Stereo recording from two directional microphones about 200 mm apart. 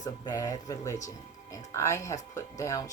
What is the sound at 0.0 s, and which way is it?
Speech, 20° left (ahead or behind).